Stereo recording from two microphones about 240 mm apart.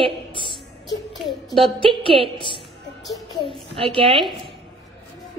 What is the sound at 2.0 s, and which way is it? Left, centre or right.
Speech, right.